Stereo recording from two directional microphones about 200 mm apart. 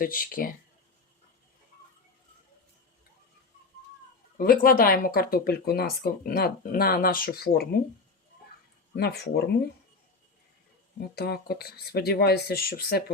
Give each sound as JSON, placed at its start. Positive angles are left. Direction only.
{"t": 0.0, "sound": "speech", "side_deg": 45}
{"t": 4.4, "sound": "speech", "side_deg": 45}
{"t": 9.0, "sound": "speech", "side_deg": 50}
{"t": 11.1, "sound": "speech", "side_deg": 50}